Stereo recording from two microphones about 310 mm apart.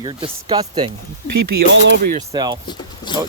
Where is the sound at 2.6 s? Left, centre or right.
Centre.